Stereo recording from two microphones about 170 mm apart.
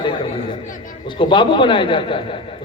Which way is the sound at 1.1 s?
30° left (ahead or behind).